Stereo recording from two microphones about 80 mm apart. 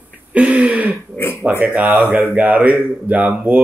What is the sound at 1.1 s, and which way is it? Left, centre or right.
Speech, left.